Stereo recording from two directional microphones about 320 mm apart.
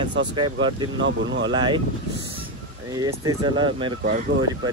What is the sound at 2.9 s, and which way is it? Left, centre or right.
Speech, centre.